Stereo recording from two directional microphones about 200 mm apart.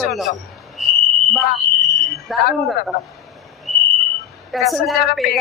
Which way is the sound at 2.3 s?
Centre (ahead or behind).